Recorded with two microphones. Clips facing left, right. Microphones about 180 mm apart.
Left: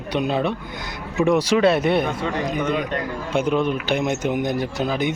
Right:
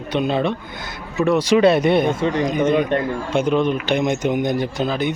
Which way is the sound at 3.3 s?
5° left (ahead or behind).